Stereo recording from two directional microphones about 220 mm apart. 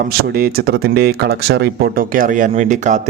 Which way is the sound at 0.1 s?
45° right (ahead or behind).